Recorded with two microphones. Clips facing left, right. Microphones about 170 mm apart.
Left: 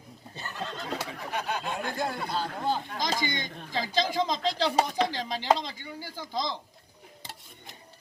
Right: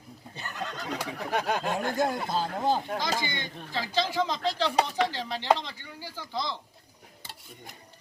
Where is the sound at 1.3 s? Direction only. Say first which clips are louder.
Right 4 dB; 55° right (ahead or behind).